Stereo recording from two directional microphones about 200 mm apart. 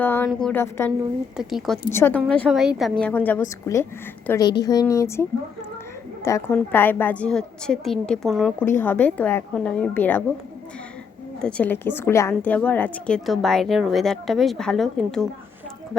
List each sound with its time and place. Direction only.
0.0 s a sound: 10° left (ahead or behind)
0.3 s a woman's voice: 5° left (ahead or behind)
1.4 s a woman's voice: centre (ahead or behind)
1.9 s a woman's voice: 10° left (ahead or behind)
11.3 s a woman's voice: 5° left (ahead or behind)